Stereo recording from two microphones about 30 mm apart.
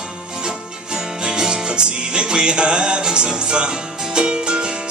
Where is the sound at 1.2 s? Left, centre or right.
Right.